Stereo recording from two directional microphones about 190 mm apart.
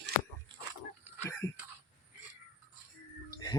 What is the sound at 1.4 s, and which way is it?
Throat clearing, 15° left (ahead or behind).